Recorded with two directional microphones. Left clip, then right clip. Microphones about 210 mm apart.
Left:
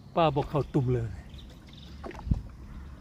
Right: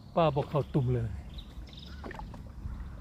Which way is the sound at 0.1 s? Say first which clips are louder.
Left 2 dB; 25° left (ahead or behind).